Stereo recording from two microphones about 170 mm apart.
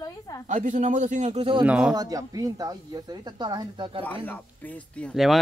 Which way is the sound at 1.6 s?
5° right (ahead or behind).